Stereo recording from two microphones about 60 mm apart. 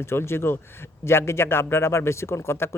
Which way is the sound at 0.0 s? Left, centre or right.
Left.